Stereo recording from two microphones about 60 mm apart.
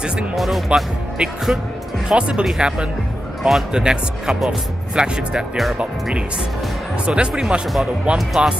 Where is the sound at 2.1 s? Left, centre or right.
Centre.